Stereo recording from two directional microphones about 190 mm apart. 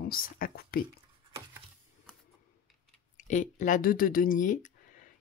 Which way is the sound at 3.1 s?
40° left (ahead or behind).